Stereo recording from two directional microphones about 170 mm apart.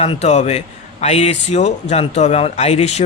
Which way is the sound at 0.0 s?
40° left (ahead or behind).